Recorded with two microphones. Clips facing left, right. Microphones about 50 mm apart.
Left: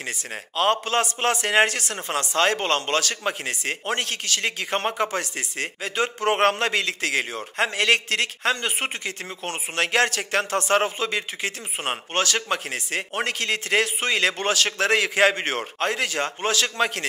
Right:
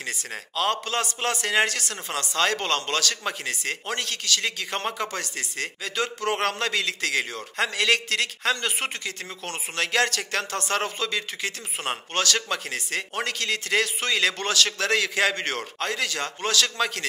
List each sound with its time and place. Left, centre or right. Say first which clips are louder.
0.6 s a man's voice: left 4 dB; left